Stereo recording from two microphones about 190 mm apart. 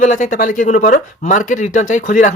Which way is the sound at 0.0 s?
40° left (ahead or behind).